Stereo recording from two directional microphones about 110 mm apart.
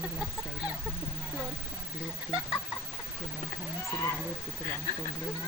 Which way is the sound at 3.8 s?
30° left (ahead or behind).